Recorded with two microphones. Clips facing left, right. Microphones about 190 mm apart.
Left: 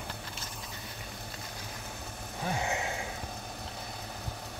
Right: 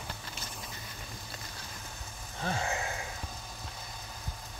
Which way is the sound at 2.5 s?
20° left (ahead or behind).